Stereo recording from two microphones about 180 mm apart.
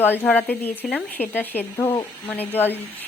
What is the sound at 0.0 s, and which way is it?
Speech, 10° left (ahead or behind).